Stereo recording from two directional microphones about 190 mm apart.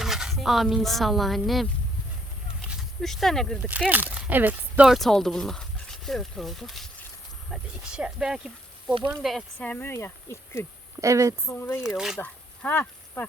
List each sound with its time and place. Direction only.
0.0 s speech: centre (ahead or behind)
2.6 s speech: centre (ahead or behind)
11.0 s speech: 15° right (ahead or behind)
11.4 s speech: 10° left (ahead or behind)
12.2 s a sound: 10° left (ahead or behind)